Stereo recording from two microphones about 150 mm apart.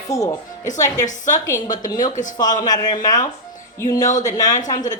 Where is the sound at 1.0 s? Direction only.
60° left (ahead or behind).